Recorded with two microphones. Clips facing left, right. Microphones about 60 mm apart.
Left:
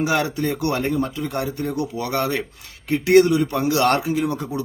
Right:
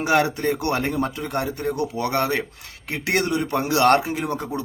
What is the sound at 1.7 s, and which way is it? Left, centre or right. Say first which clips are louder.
A man's voice: right 2 dB; right.